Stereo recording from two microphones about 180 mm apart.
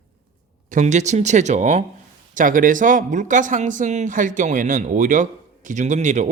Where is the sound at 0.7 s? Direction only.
40° right (ahead or behind).